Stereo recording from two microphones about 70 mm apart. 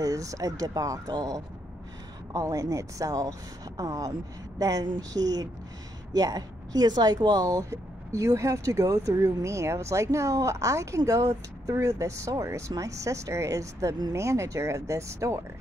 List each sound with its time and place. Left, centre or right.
0.0 s speech: right